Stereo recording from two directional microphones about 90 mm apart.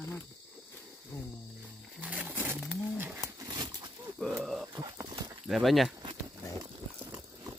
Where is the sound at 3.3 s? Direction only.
45° right (ahead or behind).